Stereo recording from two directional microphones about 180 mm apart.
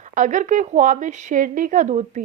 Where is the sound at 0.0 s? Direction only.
45° right (ahead or behind).